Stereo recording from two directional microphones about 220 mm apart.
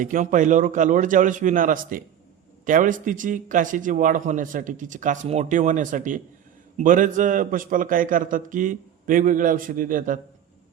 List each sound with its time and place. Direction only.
0.0 s a man's voice: 35° right (ahead or behind)